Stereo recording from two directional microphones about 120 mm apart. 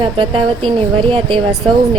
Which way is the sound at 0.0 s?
45° right (ahead or behind).